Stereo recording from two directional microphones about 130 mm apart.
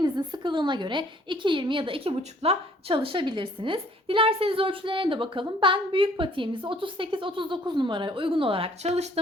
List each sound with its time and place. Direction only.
0.0 s a woman's voice: 35° right (ahead or behind); by 9.0 s 50° right (ahead or behind)